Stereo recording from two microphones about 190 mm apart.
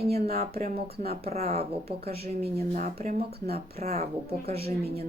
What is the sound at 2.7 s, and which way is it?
Speech, 50° right (ahead or behind).